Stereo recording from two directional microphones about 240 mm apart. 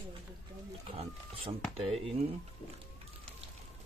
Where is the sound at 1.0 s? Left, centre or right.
Right.